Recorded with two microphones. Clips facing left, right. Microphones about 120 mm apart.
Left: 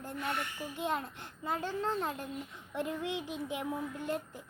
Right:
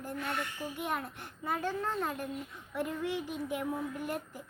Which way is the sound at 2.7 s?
20° left (ahead or behind).